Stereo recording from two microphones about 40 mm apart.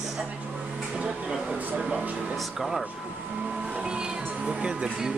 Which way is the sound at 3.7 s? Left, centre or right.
Right.